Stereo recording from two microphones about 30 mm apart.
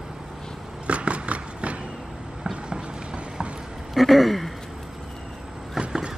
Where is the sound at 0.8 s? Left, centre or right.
Right.